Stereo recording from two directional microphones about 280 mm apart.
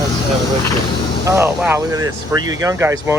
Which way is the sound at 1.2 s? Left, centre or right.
Centre.